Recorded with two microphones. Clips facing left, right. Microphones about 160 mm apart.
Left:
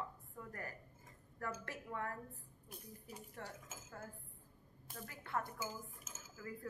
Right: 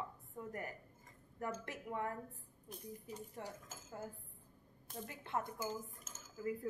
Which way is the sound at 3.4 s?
15° right (ahead or behind).